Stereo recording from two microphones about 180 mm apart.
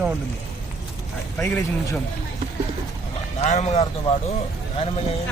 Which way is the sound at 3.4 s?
35° left (ahead or behind).